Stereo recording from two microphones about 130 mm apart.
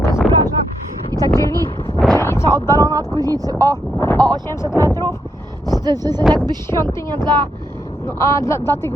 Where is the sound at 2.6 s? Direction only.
20° left (ahead or behind).